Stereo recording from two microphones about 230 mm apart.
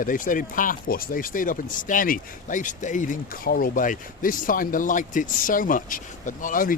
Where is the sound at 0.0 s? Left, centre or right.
Left.